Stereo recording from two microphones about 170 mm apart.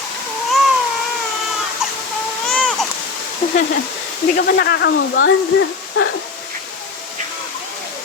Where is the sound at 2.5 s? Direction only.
5° left (ahead or behind).